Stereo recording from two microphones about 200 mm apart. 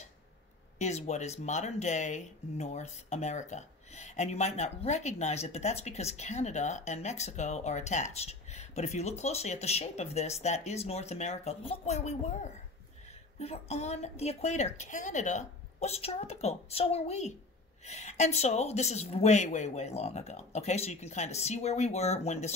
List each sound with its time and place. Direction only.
0.7 s speech: 35° left (ahead or behind)